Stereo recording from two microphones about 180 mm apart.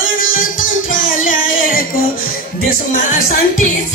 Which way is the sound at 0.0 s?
90° left.